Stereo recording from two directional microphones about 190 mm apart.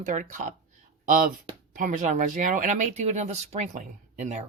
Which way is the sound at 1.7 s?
40° right (ahead or behind).